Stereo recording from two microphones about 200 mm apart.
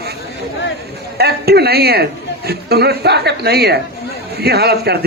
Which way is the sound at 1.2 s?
50° right (ahead or behind).